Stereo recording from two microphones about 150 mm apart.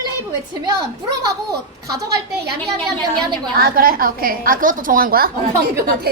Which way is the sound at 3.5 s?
80° right.